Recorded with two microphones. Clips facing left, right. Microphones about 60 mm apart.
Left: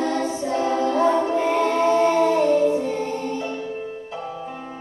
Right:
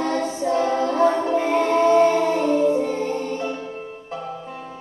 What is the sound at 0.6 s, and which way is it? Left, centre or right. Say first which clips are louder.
Child singing: left 1 dB; right.